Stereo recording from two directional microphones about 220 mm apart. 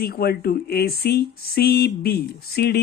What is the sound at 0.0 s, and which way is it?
Speech, 45° left (ahead or behind).